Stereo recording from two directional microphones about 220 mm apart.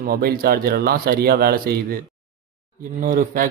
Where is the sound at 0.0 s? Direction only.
45° right (ahead or behind).